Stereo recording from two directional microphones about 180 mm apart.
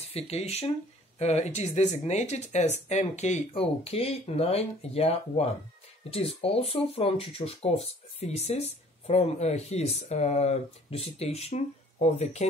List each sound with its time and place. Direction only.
0.1 s speech: 35° left (ahead or behind)